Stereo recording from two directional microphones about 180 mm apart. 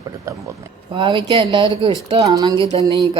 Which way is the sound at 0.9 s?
25° right (ahead or behind).